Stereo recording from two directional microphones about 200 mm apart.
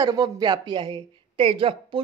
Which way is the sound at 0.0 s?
20° right (ahead or behind).